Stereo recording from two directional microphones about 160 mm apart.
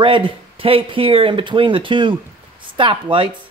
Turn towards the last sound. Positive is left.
turn(degrees=-30)  # may be behind; listen again after turning